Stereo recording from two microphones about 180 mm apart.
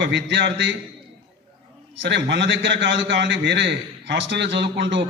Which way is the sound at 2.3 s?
75° right (ahead or behind).